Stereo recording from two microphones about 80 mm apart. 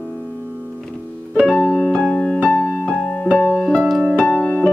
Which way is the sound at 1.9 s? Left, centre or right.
Centre.